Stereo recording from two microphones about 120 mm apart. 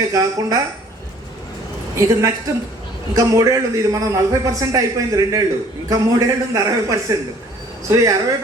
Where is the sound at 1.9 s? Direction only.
25° right (ahead or behind).